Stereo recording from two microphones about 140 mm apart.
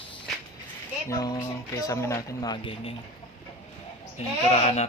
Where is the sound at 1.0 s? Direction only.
25° left (ahead or behind).